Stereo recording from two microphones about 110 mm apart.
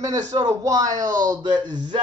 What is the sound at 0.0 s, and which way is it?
Speech, 35° right (ahead or behind).